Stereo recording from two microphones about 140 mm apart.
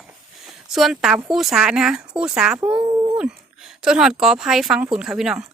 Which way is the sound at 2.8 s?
30° right (ahead or behind).